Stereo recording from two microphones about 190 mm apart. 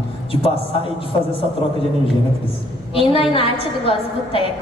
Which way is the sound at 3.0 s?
30° left (ahead or behind).